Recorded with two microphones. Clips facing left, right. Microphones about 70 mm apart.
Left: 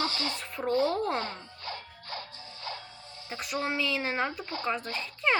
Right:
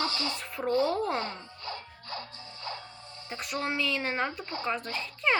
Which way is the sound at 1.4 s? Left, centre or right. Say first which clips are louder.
Even; right.